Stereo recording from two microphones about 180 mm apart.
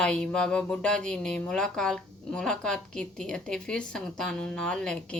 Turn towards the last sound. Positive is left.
turn(degrees=5)  # may be behind; listen again after turning